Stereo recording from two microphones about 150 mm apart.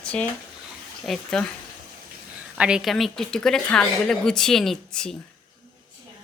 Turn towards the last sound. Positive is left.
turn(degrees=5)  # may be behind; listen again after turning